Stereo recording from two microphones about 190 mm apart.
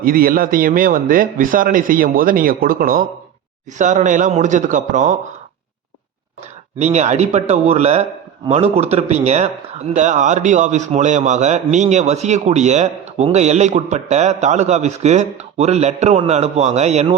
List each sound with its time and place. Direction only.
0.0 s a man's voice: 50° right (ahead or behind)
6.7 s speech: 35° right (ahead or behind)